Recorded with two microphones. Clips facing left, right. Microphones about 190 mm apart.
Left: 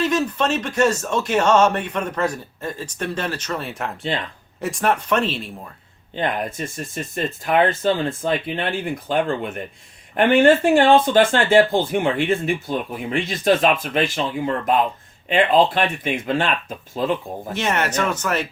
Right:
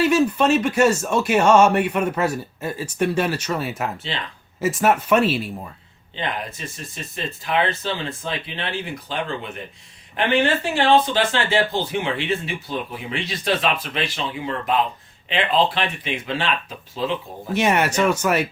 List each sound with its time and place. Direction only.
0.0 s speech: 10° right (ahead or behind)
6.1 s speech: 50° left (ahead or behind)
17.5 s speech: 10° right (ahead or behind)